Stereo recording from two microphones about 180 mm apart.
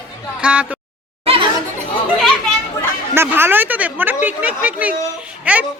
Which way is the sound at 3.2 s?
10° right (ahead or behind).